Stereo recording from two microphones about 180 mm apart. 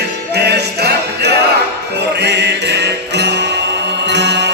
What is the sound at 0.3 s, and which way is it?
Music, 65° right (ahead or behind).